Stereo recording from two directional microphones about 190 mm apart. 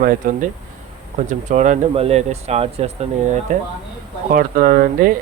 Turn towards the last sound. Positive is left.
turn(degrees=-50)  # may be behind; listen again after turning